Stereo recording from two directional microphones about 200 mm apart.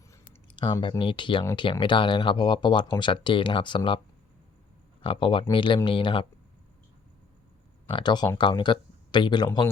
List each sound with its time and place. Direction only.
0.1 s a sound: 25° left (ahead or behind)
1.5 s speech: 20° left (ahead or behind)
5.0 s speech: 25° left (ahead or behind)
7.9 s speech: 25° left (ahead or behind)